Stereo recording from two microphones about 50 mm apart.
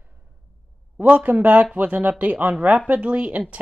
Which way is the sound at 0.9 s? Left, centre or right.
Right.